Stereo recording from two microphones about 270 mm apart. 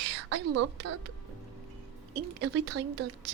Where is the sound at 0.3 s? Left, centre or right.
Right.